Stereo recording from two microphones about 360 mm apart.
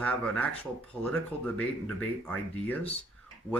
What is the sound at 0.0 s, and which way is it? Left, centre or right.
Speech, centre.